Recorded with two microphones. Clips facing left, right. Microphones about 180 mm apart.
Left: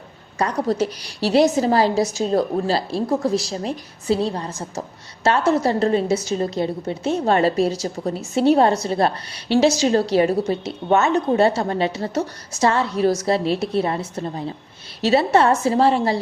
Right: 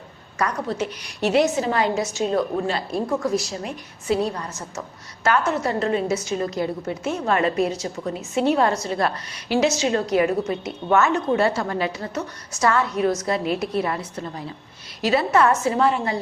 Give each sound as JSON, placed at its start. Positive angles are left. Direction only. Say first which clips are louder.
{"t": 0.3, "sound": "a woman's voice", "louder": "left 4 dB", "side_deg": 35}